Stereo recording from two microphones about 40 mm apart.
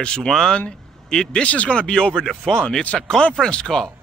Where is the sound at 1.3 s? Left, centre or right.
Left.